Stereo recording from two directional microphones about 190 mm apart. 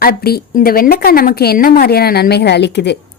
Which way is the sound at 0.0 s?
50° left (ahead or behind).